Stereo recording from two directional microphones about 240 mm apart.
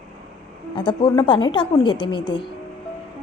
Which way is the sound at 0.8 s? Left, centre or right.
Centre.